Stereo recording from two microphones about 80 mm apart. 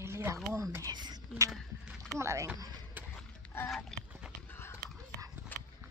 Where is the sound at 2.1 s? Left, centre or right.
Right.